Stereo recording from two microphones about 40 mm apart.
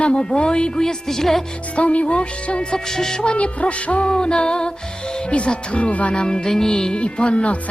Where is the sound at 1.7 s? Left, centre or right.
Left.